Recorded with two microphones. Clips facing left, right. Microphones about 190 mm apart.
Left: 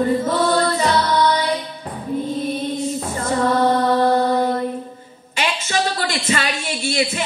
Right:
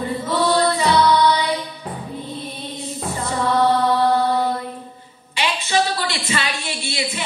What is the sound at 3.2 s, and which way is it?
Music, 45° left (ahead or behind).